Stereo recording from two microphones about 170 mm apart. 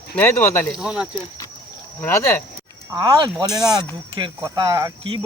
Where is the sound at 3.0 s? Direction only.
25° right (ahead or behind).